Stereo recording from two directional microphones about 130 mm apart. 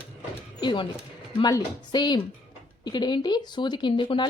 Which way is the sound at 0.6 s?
35° left (ahead or behind).